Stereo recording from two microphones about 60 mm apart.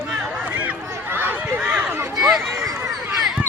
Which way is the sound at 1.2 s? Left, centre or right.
Right.